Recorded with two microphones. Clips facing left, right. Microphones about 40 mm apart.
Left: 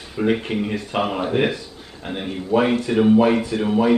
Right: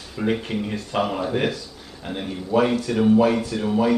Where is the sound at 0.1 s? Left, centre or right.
Centre.